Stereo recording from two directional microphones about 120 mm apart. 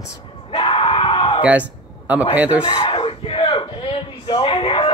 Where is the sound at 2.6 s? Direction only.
50° left (ahead or behind).